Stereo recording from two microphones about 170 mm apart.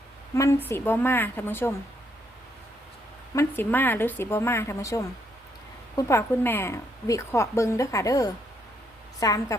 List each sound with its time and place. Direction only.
0.3 s speech: 15° left (ahead or behind)
3.3 s a woman's voice: 10° left (ahead or behind)